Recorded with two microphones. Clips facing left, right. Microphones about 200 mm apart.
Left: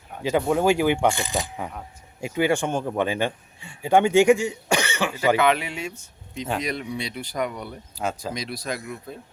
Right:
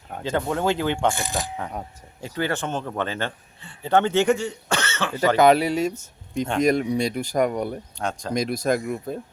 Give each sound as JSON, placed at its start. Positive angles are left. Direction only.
{"t": 0.2, "sound": "speech", "side_deg": 10}
{"t": 5.4, "sound": "speech", "side_deg": -40}
{"t": 7.9, "sound": "speech", "side_deg": 5}
{"t": 8.3, "sound": "speech", "side_deg": -50}